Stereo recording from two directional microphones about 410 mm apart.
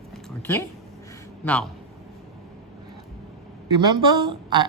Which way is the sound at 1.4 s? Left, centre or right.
Centre.